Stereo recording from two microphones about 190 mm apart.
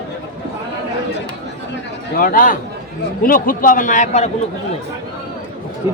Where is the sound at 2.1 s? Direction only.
50° left (ahead or behind).